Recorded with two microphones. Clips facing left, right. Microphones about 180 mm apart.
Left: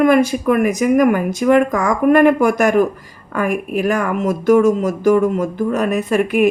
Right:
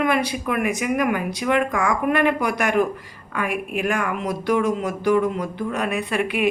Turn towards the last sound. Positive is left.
turn(degrees=45)  # may be behind; listen again after turning